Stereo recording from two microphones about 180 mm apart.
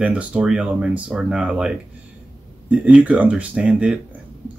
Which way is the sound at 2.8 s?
5° right (ahead or behind).